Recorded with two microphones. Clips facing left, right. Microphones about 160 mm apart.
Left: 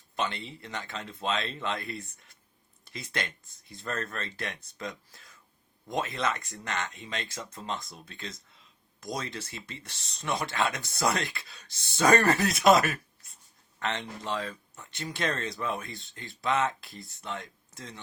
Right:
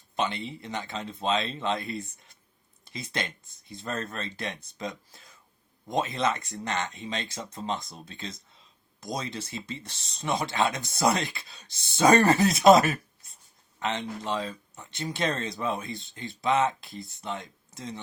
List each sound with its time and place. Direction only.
0.2 s speech: 20° right (ahead or behind)
13.7 s speech: 15° right (ahead or behind)